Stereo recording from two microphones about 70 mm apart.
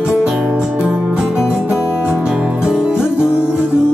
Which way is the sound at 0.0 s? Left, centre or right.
Centre.